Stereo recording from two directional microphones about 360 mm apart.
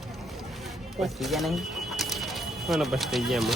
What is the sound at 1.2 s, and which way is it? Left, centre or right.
Speech, centre.